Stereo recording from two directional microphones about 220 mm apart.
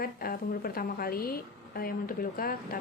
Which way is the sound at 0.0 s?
45° left (ahead or behind).